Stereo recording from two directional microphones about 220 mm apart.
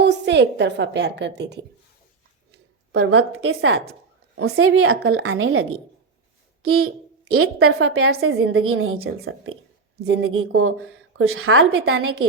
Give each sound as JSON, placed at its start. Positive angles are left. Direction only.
{"t": 0.0, "sound": "a woman's voice", "side_deg": -50}
{"t": 2.9, "sound": "a woman's voice", "side_deg": -50}
{"t": 10.1, "sound": "a woman's voice", "side_deg": -70}